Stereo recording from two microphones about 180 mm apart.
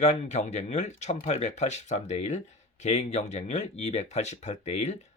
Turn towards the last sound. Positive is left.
turn(degrees=40)  # may be behind; listen again after turning